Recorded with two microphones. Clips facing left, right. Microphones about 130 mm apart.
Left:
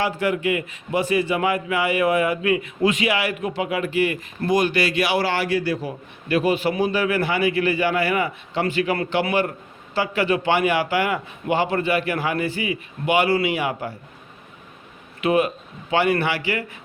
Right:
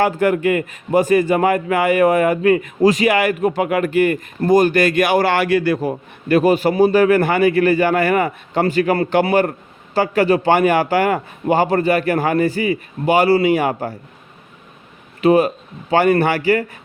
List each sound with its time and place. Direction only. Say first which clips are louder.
0.0 s a man's voice: right 6 dB; 50° right (ahead or behind)
15.2 s a man's voice: right 6 dB; 35° right (ahead or behind)